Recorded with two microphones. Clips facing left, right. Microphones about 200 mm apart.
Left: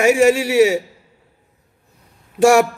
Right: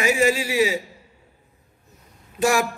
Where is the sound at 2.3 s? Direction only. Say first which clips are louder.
Left 8 dB; 75° left (ahead or behind).